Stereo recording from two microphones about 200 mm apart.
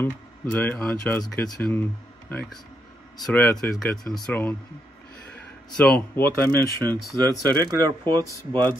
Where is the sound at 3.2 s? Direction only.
Centre (ahead or behind).